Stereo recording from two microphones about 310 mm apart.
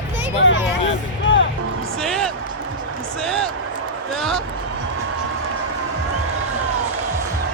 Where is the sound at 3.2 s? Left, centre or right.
Centre.